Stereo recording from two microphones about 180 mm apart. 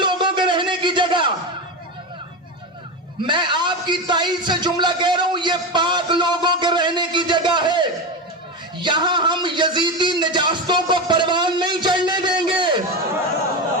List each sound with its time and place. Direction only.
0.0 s music: 25° right (ahead or behind)
3.2 s speech: 25° right (ahead or behind)